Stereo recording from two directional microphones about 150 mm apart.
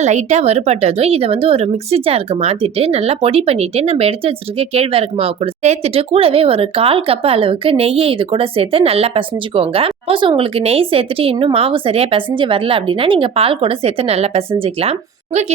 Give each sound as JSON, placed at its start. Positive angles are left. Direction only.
{"t": 0.0, "sound": "speech", "side_deg": -50}